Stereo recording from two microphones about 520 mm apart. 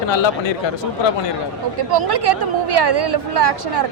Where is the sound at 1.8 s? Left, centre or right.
Right.